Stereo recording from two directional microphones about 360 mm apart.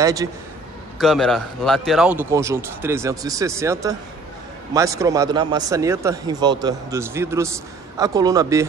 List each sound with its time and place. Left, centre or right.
0.0 s a man's voice: centre